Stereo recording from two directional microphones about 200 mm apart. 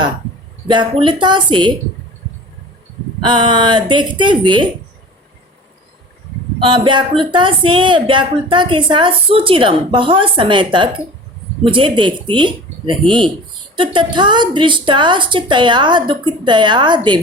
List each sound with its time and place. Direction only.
0.7 s speech: 25° right (ahead or behind)
3.2 s speech: 25° right (ahead or behind)
6.6 s speech: 25° right (ahead or behind)